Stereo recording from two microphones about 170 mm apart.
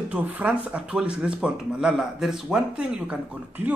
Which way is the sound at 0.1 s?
10° right (ahead or behind).